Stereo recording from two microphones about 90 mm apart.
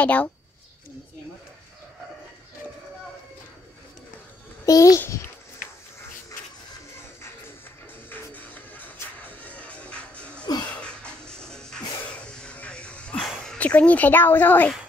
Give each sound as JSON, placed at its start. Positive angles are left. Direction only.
{"t": 0.0, "sound": "speech", "side_deg": 15}
{"t": 4.6, "sound": "a child's voice", "side_deg": 40}
{"t": 8.1, "sound": "music", "side_deg": 20}
{"t": 12.1, "sound": "sneeze", "side_deg": 10}
{"t": 13.6, "sound": "speech", "side_deg": 15}